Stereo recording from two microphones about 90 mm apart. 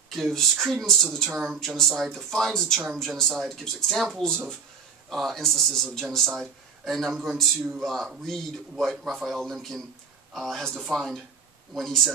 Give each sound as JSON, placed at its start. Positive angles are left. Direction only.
{"t": 0.1, "sound": "a man's voice", "side_deg": 0}
{"t": 1.4, "sound": "a man's voice", "side_deg": -5}